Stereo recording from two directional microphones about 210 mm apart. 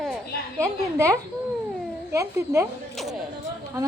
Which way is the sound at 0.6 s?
15° right (ahead or behind).